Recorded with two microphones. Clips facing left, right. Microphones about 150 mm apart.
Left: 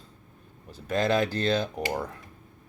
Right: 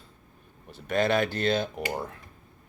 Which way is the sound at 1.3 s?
40° left (ahead or behind).